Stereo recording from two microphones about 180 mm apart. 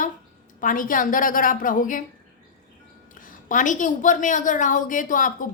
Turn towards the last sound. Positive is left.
turn(degrees=45)  # may be behind; listen again after turning